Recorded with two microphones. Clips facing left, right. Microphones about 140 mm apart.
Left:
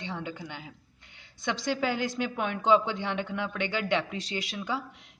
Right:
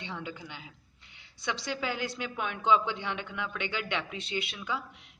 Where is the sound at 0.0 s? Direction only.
40° left (ahead or behind).